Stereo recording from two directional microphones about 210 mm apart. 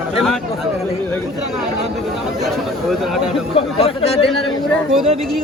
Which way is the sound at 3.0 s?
Centre (ahead or behind).